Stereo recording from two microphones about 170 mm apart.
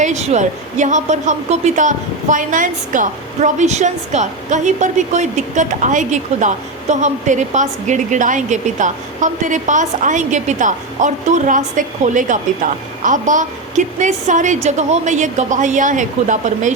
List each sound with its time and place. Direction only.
0.0 s a woman's voice: 40° right (ahead or behind)